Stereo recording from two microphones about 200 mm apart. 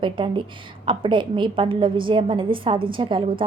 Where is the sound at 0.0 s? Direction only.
25° right (ahead or behind).